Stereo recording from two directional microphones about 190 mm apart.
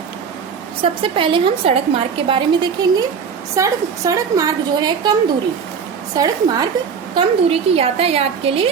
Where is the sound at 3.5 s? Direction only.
15° right (ahead or behind).